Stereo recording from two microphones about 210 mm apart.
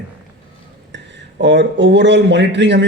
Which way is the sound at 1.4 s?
55° right (ahead or behind).